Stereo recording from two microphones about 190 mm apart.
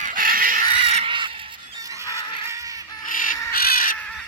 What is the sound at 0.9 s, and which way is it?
Crow, 30° right (ahead or behind).